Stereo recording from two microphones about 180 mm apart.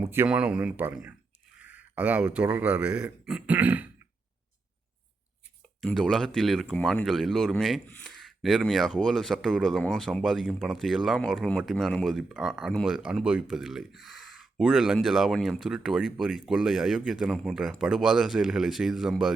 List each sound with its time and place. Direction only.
0.0 s speech: 10° right (ahead or behind)
5.8 s speech: centre (ahead or behind)